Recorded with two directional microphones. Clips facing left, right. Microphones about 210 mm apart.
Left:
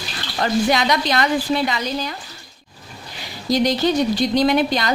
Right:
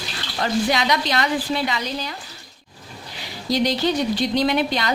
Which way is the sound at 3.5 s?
45° left (ahead or behind).